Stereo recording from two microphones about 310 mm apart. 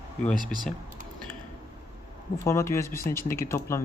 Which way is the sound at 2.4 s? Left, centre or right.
Centre.